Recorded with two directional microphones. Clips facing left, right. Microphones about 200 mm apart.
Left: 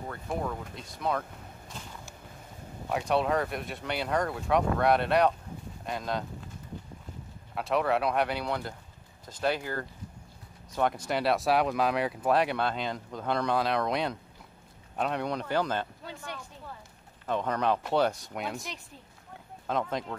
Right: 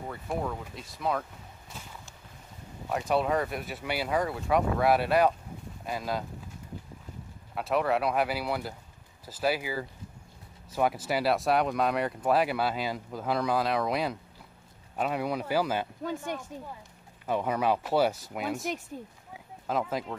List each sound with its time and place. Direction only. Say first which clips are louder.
0.1 s speech: even; centre (ahead or behind)
2.9 s speech: even; centre (ahead or behind)
7.5 s speech: even; centre (ahead or behind)
16.3 s speech: right 6 dB; 45° right (ahead or behind)
17.3 s speech: right 1 dB; 10° right (ahead or behind)